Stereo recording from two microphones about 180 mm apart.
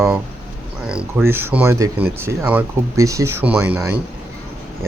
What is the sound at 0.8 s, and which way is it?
Speech, 5° right (ahead or behind).